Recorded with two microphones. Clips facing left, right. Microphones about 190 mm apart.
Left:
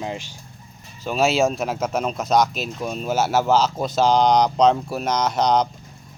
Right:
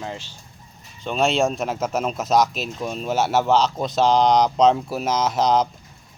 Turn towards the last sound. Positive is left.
turn(degrees=0)  # may be behind; listen again after turning